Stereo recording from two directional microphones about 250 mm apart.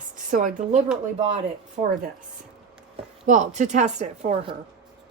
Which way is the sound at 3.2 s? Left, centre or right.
Right.